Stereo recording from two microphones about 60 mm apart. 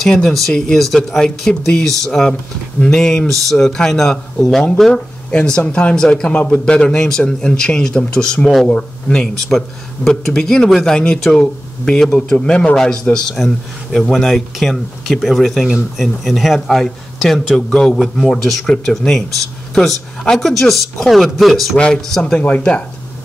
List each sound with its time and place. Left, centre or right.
0.0 s a man's voice: centre
22.2 s speech: left